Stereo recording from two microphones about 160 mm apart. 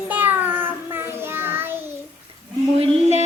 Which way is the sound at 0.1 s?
10° right (ahead or behind).